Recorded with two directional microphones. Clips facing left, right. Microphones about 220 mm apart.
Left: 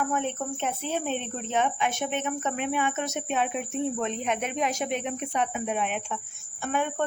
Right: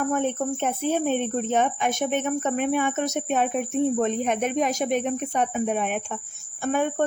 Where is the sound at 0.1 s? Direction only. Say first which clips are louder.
Right 5 dB; 50° right (ahead or behind).